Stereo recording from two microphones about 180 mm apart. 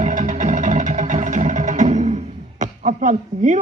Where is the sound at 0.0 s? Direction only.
40° right (ahead or behind).